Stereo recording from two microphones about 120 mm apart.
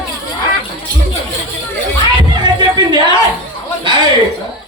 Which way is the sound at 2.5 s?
40° right (ahead or behind).